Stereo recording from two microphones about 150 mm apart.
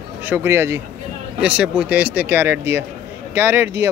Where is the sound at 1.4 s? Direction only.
5° right (ahead or behind).